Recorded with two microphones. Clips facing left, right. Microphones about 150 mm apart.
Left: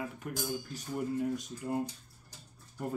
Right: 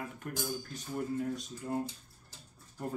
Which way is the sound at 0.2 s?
5° left (ahead or behind).